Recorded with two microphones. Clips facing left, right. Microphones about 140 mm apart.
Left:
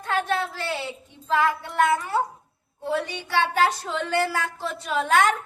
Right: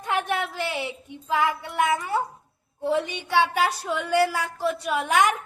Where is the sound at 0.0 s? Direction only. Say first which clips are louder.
Left 1 dB; 15° right (ahead or behind).